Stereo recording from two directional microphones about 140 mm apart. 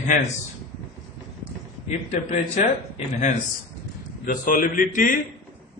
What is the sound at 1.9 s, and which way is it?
Speech, 55° left (ahead or behind).